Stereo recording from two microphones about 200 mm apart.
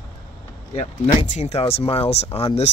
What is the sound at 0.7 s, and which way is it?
Speech, 30° left (ahead or behind).